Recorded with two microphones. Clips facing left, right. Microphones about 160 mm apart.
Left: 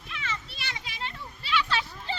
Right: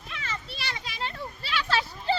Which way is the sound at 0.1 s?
35° right (ahead or behind).